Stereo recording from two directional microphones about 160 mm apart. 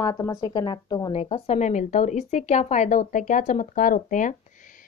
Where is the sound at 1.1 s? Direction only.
40° left (ahead or behind).